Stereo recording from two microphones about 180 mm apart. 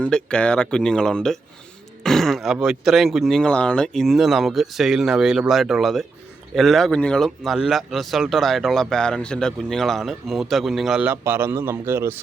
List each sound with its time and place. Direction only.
0.0 s speech: 5° left (ahead or behind); by 12.1 s 15° right (ahead or behind)